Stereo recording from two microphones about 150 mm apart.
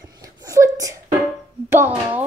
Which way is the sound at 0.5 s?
20° right (ahead or behind).